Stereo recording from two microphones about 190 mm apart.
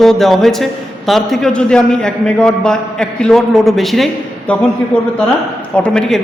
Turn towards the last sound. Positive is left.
turn(degrees=5)  # may be behind; listen again after turning